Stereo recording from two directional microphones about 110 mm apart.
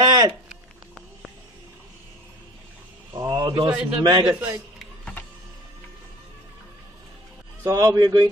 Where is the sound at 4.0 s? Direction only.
45° right (ahead or behind).